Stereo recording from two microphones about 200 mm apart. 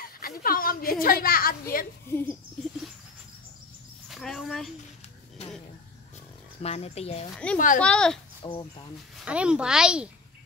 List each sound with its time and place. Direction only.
0.0 s a woman's voice: 45° left (ahead or behind)
2.0 s speech: 10° left (ahead or behind)
4.1 s speech: centre (ahead or behind)
6.6 s speech: 30° left (ahead or behind)
7.5 s speech: 40° left (ahead or behind)
7.8 s speech: 5° left (ahead or behind)
8.4 s speech: 20° left (ahead or behind)
9.2 s speech: 5° right (ahead or behind)